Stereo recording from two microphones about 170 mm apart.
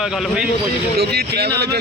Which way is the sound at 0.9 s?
70° right (ahead or behind).